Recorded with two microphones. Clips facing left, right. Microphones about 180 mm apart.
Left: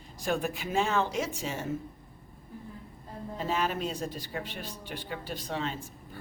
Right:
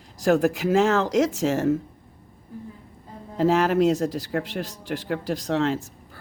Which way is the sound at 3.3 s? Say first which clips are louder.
Right 11 dB; 90° right.